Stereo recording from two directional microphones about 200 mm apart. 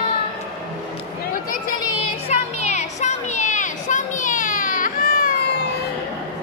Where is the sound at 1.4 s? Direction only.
45° left (ahead or behind).